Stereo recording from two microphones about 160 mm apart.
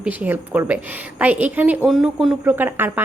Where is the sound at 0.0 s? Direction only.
10° right (ahead or behind).